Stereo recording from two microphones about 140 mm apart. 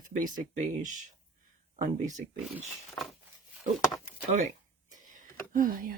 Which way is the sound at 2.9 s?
Centre (ahead or behind).